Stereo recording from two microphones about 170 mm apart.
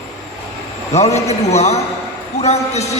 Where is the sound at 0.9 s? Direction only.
40° left (ahead or behind).